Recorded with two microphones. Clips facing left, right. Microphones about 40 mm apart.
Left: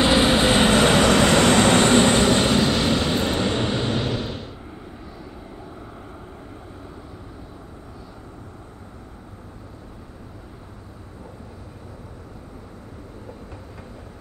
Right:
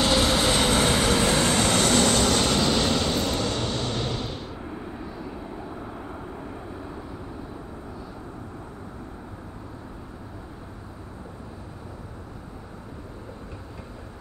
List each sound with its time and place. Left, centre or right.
0.0 s vehicle: left
0.7 s train: left
2.5 s vehicle: centre
3.2 s vehicle: left; by 4.5 s centre
4.6 s vehicle: centre